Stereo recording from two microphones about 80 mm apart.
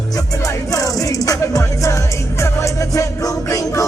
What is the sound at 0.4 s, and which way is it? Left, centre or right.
Music, left.